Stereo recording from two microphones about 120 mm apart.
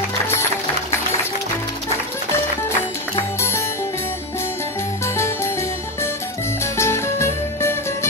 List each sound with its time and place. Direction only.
3.2 s music: 20° left (ahead or behind)
5.0 s music: 20° left (ahead or behind)